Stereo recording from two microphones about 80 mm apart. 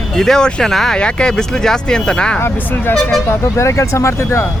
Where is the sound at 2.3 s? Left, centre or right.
Left.